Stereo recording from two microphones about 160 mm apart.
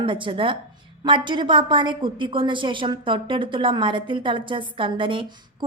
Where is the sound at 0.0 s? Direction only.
30° right (ahead or behind).